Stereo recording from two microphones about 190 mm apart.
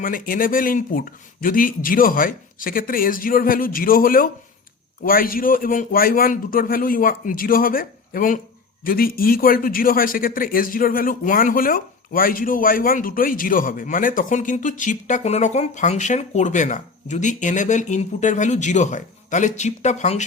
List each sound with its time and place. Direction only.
0.0 s a man's voice: 45° left (ahead or behind)